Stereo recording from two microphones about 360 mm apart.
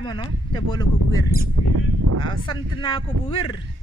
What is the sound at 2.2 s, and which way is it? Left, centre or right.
Speech, centre.